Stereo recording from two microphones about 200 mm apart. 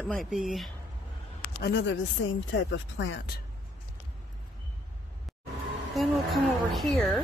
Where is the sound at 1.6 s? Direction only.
60° left (ahead or behind).